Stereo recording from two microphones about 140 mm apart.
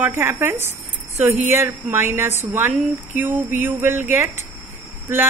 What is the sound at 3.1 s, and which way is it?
Speech, 15° right (ahead or behind).